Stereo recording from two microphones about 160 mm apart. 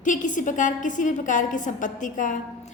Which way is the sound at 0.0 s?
55° left (ahead or behind).